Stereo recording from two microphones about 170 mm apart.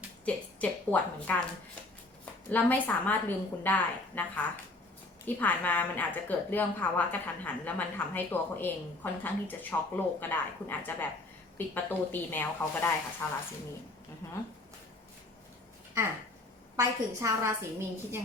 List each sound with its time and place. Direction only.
0.3 s a woman's voice: 10° left (ahead or behind)
2.5 s a woman's voice: 10° left (ahead or behind)
5.2 s a woman's voice: 10° left (ahead or behind)
16.7 s a woman's voice: 20° right (ahead or behind)